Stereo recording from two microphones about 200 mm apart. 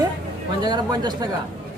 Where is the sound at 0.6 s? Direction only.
20° right (ahead or behind).